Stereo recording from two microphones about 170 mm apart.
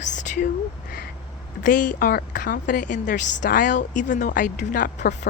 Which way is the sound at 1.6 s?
50° left (ahead or behind).